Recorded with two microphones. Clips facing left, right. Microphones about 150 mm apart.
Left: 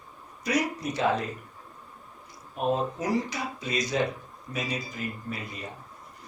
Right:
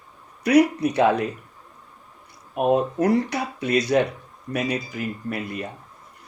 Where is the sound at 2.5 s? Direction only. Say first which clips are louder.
Right 7 dB; 65° right (ahead or behind).